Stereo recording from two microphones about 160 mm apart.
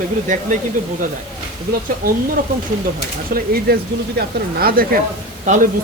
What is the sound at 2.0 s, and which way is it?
Speech, 65° right (ahead or behind).